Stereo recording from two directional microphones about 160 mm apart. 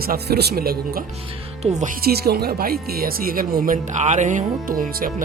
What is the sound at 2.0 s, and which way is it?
Speech, 80° right.